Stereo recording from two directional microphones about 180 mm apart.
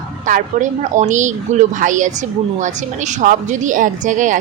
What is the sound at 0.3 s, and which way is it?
A woman's voice, 45° right (ahead or behind).